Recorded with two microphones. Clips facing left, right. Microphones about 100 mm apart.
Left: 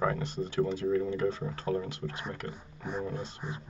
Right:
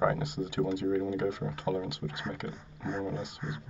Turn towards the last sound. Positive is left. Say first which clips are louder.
# right 1 dB
turn(degrees=25)  # may be behind; listen again after turning